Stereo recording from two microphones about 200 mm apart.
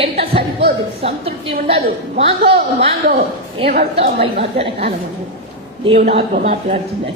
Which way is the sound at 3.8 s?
30° right (ahead or behind).